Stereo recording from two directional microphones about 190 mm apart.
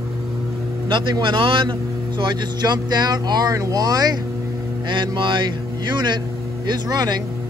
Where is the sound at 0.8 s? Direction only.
25° right (ahead or behind).